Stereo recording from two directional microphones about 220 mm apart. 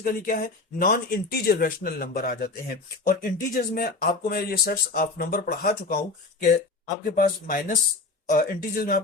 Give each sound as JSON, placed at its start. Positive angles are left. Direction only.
{"t": 0.0, "sound": "speech", "side_deg": 40}